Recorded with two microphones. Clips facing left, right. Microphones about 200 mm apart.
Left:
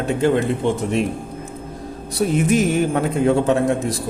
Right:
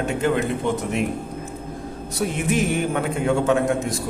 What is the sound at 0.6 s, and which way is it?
Speech, 30° left (ahead or behind).